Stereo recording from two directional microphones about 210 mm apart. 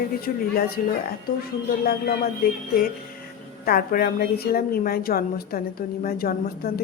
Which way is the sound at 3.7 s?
45° left (ahead or behind).